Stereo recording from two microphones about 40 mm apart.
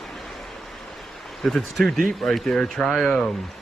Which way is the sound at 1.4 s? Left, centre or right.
Centre.